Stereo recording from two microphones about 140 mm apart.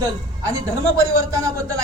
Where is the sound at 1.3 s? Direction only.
20° right (ahead or behind).